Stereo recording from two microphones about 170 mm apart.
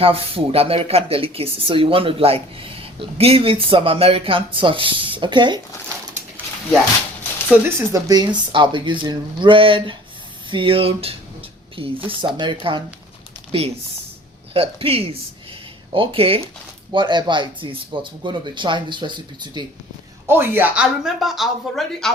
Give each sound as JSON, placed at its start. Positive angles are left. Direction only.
{"t": 0.0, "sound": "speech", "side_deg": -35}
{"t": 7.5, "sound": "speech", "side_deg": -20}
{"t": 20.2, "sound": "speech", "side_deg": -15}